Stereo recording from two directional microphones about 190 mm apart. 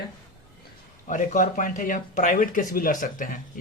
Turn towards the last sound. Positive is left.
turn(degrees=45)  # may be behind; listen again after turning